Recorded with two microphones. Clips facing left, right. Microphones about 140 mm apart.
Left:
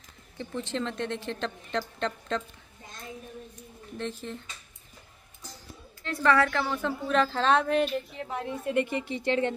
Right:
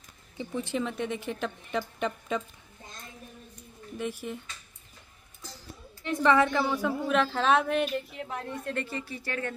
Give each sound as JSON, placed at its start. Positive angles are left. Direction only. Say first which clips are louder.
{"t": 0.4, "sound": "a woman's voice", "louder": "right 1 dB", "side_deg": -15}
{"t": 4.0, "sound": "a woman's voice", "louder": "right 1 dB", "side_deg": -10}
{"t": 6.0, "sound": "a woman's voice", "louder": "right 1 dB", "side_deg": -15}
{"t": 8.7, "sound": "speech", "louder": "left 7 dB", "side_deg": 20}